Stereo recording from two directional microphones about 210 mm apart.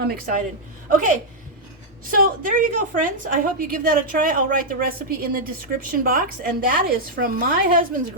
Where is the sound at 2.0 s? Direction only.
40° right (ahead or behind).